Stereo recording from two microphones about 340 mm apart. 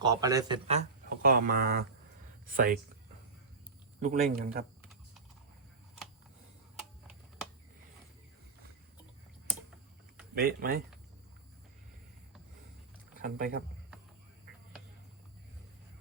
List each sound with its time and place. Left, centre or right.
0.0 s a man's voice: centre
4.0 s a man's voice: right
10.3 s a man's voice: right
13.2 s a man's voice: right